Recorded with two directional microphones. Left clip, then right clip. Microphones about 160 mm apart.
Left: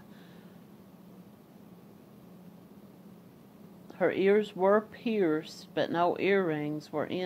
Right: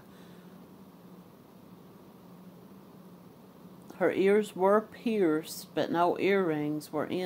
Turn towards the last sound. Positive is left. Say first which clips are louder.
# even
turn(degrees=20)  # may be behind; listen again after turning